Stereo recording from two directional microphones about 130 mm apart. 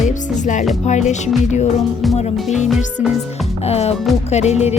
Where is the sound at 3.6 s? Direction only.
55° left (ahead or behind).